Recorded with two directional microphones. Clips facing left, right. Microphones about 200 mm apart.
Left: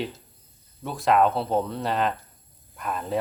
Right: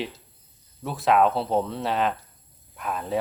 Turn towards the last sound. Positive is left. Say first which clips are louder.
# even
turn(degrees=0)  # may be behind; listen again after turning